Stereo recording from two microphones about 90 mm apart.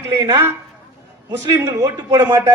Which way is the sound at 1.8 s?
40° right (ahead or behind).